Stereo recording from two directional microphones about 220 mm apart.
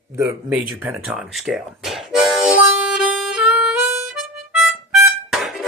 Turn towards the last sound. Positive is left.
turn(degrees=0)  # may be behind; listen again after turning